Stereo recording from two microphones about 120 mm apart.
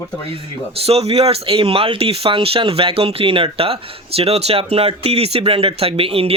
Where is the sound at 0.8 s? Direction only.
55° right (ahead or behind).